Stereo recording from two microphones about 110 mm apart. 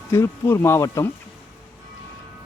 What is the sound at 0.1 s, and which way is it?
Speech, 20° left (ahead or behind).